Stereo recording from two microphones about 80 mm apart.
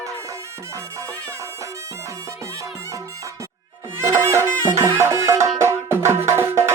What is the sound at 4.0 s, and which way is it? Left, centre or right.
Music, right.